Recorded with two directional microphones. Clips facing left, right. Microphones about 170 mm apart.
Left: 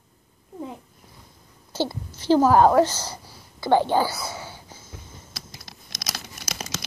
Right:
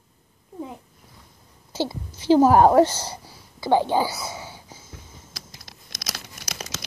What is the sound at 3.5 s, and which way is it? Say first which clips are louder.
Speech: even; 10° right (ahead or behind).